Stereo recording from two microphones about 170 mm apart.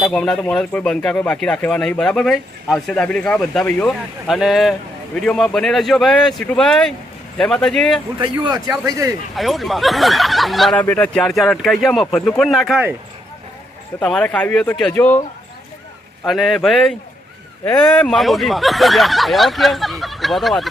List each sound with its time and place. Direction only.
0.0 s speech: 5° left (ahead or behind)
8.2 s a man's voice: 25° right (ahead or behind)
9.3 s speech: centre (ahead or behind)
14.0 s speech: 5° left (ahead or behind)
16.2 s speech: centre (ahead or behind)